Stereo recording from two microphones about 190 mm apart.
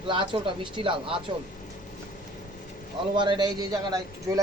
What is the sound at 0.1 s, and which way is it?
A man's voice, 25° right (ahead or behind).